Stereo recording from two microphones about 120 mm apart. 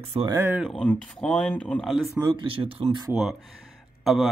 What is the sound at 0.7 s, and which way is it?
Speech, 10° left (ahead or behind).